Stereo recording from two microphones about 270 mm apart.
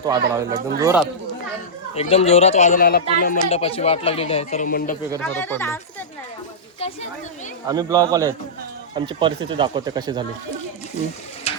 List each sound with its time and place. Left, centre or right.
0.0 s speech: centre
2.0 s speech: left
5.2 s speech: centre
7.7 s speech: centre